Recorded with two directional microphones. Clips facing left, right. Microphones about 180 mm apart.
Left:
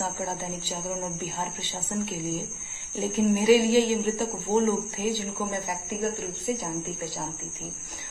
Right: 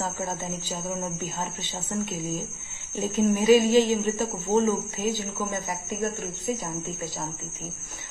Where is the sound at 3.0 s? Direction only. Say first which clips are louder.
Even; 10° left (ahead or behind).